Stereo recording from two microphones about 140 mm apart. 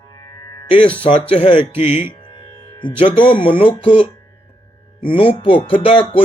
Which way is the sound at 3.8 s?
40° left (ahead or behind).